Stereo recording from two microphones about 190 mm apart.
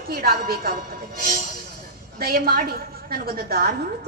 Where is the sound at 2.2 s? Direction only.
55° right (ahead or behind).